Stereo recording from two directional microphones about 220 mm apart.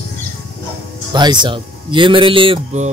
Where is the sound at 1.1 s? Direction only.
20° right (ahead or behind).